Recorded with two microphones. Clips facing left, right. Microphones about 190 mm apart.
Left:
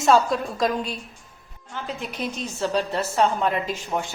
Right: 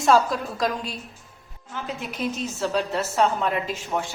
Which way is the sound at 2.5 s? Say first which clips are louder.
Left 3 dB; 5° right (ahead or behind).